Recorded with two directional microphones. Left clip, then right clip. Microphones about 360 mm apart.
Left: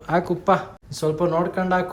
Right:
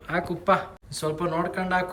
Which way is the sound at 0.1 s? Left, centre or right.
Centre.